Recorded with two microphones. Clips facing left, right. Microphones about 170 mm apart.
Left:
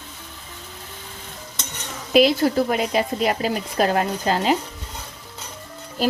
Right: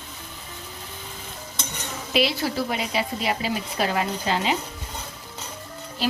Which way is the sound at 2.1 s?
45° left (ahead or behind).